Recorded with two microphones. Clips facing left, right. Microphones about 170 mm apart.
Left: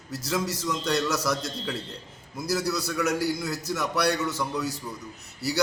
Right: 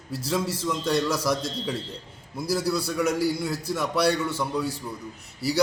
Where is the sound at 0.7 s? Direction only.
10° right (ahead or behind).